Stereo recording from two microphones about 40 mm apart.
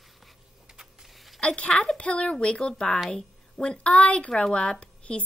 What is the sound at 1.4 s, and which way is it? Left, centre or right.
Speech, left.